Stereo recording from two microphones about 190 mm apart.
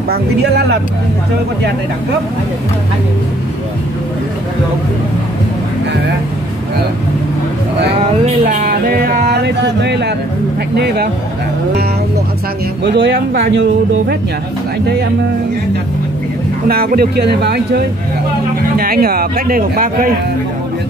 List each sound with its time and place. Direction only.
0.1 s a man's voice: 60° right (ahead or behind)
8.5 s speech: 45° right (ahead or behind); by 10.1 s 60° right (ahead or behind)
12.8 s a man's voice: 65° right (ahead or behind)
16.6 s speech: 50° right (ahead or behind)